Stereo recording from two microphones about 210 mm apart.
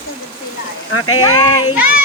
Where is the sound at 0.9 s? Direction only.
90° left.